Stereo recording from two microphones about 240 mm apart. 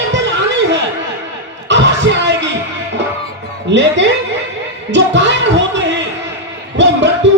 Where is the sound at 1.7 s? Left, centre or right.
Right.